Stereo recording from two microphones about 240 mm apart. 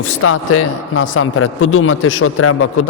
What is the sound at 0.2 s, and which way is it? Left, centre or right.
A man's voice, left.